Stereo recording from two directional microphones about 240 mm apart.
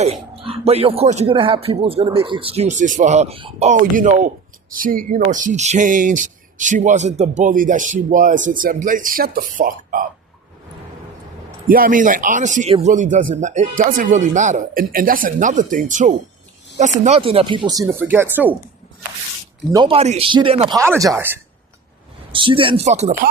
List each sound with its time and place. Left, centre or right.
0.0 s speech: right
11.7 s speech: right; by 18.5 s centre
19.7 s speech: right